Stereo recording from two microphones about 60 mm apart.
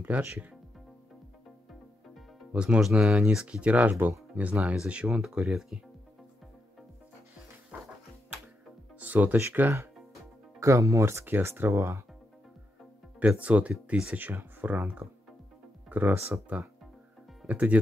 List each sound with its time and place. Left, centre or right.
0.3 s speech: right
2.5 s speech: centre
5.3 s speech: centre
9.0 s speech: right
10.6 s speech: right
11.2 s speech: right
13.4 s speech: right
14.1 s speech: right
15.9 s speech: right
17.5 s speech: right